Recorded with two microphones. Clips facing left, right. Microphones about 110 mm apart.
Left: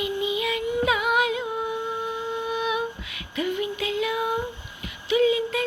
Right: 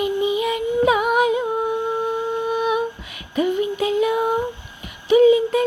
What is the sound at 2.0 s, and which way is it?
Humming, 45° right (ahead or behind).